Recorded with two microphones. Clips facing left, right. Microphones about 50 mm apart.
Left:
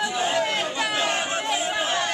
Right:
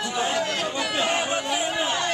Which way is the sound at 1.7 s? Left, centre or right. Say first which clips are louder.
Even; centre.